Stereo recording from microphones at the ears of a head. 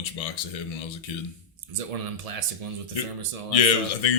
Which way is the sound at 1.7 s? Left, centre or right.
Right.